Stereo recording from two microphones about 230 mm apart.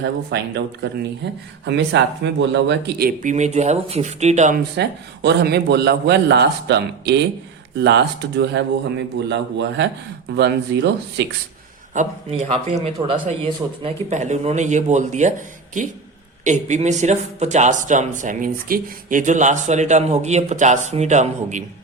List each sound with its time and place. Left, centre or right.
0.0 s speech: right
3.2 s speech: right
4.8 s speech: right
11.9 s speech: right
16.4 s speech: right